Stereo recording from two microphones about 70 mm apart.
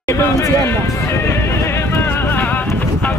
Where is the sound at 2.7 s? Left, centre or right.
Left.